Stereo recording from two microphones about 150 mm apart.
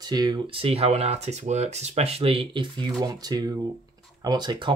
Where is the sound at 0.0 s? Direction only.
25° right (ahead or behind).